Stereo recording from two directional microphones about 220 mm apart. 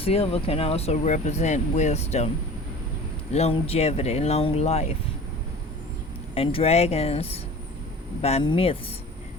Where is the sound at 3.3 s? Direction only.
30° left (ahead or behind).